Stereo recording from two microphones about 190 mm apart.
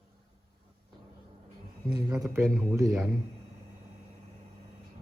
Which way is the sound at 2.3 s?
15° right (ahead or behind).